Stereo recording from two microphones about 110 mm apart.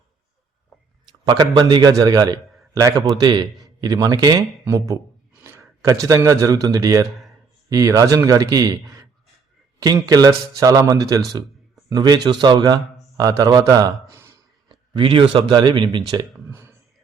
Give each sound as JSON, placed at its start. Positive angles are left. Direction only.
{"t": 1.2, "sound": "a man's voice", "side_deg": -40}
{"t": 14.9, "sound": "speech", "side_deg": -50}
{"t": 16.5, "sound": "speech", "side_deg": -20}